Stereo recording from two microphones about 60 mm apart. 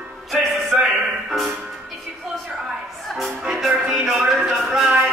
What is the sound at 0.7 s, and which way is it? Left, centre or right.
Music, centre.